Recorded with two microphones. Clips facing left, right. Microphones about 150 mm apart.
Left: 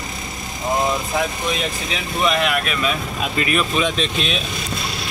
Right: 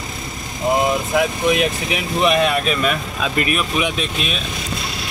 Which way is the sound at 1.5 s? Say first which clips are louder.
Right 5 dB; 15° right (ahead or behind).